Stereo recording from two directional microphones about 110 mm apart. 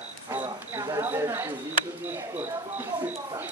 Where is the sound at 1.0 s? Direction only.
20° right (ahead or behind).